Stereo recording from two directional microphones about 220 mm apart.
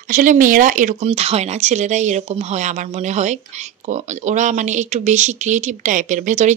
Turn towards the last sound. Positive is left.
turn(degrees=-35)  # may be behind; listen again after turning